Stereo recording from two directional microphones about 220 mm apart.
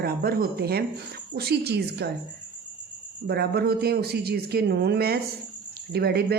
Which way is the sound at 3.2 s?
45° right (ahead or behind).